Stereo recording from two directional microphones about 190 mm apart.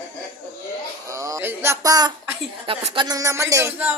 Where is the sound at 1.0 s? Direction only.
15° right (ahead or behind).